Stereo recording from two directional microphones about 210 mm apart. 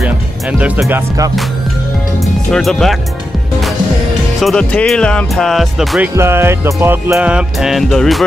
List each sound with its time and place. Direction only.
0.0 s speech: 5° right (ahead or behind)
2.5 s speech: centre (ahead or behind)
4.4 s speech: centre (ahead or behind)
6.1 s music: 10° right (ahead or behind)